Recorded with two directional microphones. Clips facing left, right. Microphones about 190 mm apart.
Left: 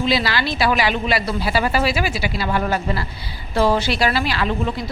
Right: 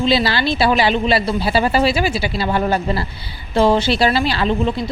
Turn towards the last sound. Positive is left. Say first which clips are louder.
# right 4 dB
turn(degrees=-25)  # may be behind; listen again after turning